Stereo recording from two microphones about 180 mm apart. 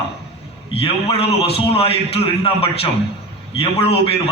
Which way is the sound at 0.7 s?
30° left (ahead or behind).